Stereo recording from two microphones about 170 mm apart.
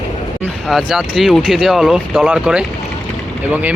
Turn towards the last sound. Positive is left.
turn(degrees=-10)  # may be behind; listen again after turning